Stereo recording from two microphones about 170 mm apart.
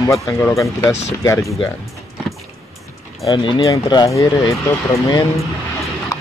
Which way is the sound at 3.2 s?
25° left (ahead or behind).